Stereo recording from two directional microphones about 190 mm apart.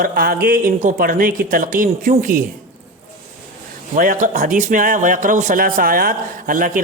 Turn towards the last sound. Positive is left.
turn(degrees=-45)  # may be behind; listen again after turning